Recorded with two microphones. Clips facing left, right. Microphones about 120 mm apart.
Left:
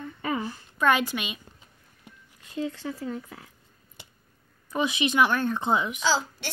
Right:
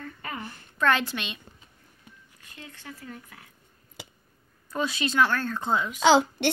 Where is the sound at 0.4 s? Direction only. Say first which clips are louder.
Left 6 dB; 60° right (ahead or behind).